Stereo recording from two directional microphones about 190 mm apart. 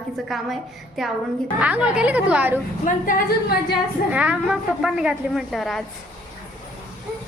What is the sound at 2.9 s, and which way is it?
Speech, 45° left (ahead or behind).